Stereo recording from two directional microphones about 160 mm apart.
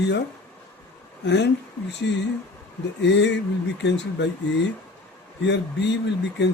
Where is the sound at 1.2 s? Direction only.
90° left.